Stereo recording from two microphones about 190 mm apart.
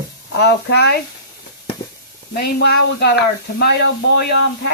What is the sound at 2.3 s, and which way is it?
Speech, 60° left (ahead or behind).